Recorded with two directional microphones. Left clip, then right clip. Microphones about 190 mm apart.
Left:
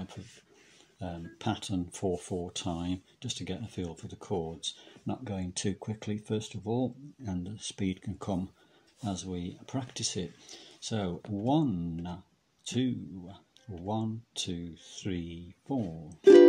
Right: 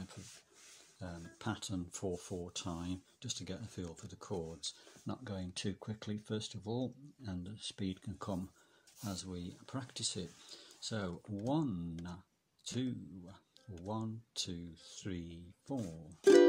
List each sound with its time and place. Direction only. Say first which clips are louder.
0.9 s speech: left 9 dB; 15° right (ahead or behind)
16.2 s music: left 8 dB; 50° right (ahead or behind)